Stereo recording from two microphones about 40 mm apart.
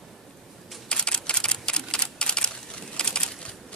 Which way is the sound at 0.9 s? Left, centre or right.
Left.